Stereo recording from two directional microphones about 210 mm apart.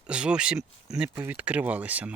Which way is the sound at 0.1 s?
5° right (ahead or behind).